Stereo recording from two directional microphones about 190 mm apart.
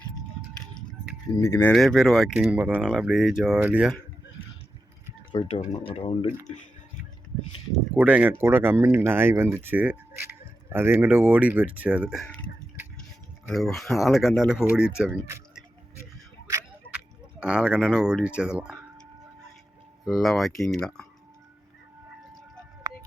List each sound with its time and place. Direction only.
1.4 s speech: 15° left (ahead or behind)
1.7 s speech: centre (ahead or behind)
5.3 s speech: 30° left (ahead or behind)
7.9 s speech: 10° right (ahead or behind)
17.4 s speech: 5° right (ahead or behind)
20.1 s speech: centre (ahead or behind)
22.8 s music: 20° right (ahead or behind)